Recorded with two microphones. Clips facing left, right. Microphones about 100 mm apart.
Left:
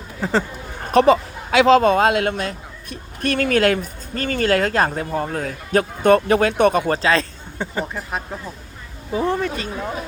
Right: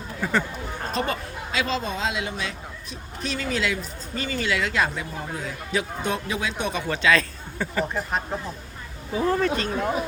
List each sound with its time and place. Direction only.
0.2 s speech: 30° left (ahead or behind)
0.9 s speech: 90° left; by 5.0 s 45° left (ahead or behind)
5.1 s a man's voice: 60° left (ahead or behind)
7.0 s speech: 30° left (ahead or behind)
9.1 s speech: 25° left (ahead or behind)
9.4 s speech: 5° left (ahead or behind)